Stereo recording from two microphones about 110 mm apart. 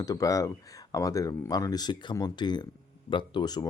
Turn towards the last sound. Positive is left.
turn(degrees=40)  # may be behind; listen again after turning